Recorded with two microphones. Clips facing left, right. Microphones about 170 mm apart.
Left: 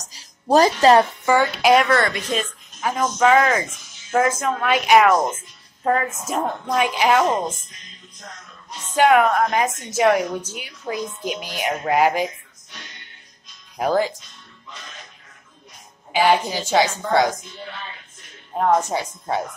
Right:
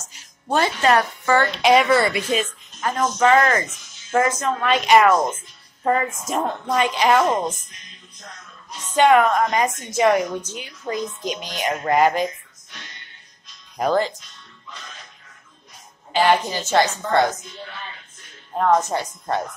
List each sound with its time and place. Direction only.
0.0 s music: 35° left (ahead or behind)
1.2 s speech: 10° left (ahead or behind); by 2.4 s 5° right (ahead or behind)
2.8 s a woman's voice: 10° left (ahead or behind)
8.7 s a woman's voice: 10° left (ahead or behind)
13.7 s a woman's voice: 10° left (ahead or behind)
16.1 s a woman's voice: 5° left (ahead or behind)
18.6 s a woman's voice: 10° left (ahead or behind)